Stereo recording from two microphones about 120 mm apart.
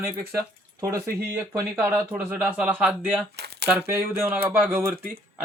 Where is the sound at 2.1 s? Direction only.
15° right (ahead or behind).